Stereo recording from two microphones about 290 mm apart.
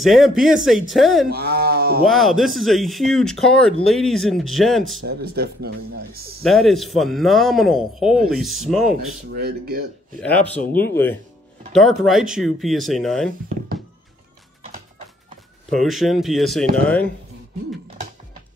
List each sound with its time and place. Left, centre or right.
0.0 s speech: centre
1.6 s a sound: right
2.0 s speech: centre
5.0 s speech: right
6.4 s speech: centre
9.3 s speech: right
10.6 s speech: left
10.9 s speech: centre
15.7 s speech: centre